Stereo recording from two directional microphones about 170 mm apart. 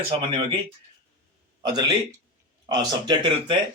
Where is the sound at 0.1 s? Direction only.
30° right (ahead or behind).